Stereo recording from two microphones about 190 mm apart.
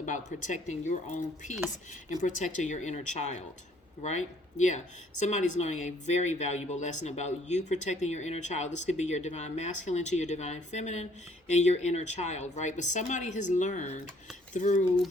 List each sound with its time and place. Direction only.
0.0 s speech: 40° left (ahead or behind)